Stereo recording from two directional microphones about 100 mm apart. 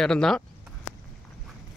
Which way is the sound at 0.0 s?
5° left (ahead or behind).